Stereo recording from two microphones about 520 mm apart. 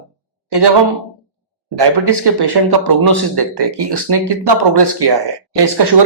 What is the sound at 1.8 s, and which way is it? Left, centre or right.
Speech, right.